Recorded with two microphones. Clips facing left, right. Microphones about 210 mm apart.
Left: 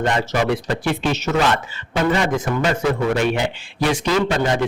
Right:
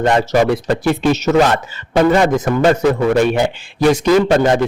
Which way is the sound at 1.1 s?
40° right (ahead or behind).